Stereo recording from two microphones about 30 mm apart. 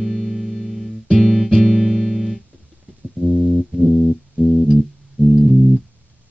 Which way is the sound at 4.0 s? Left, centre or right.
Centre.